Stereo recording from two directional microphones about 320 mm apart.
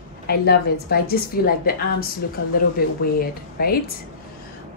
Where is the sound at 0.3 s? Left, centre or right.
Left.